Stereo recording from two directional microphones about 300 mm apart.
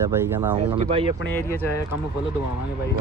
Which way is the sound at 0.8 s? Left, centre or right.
Centre.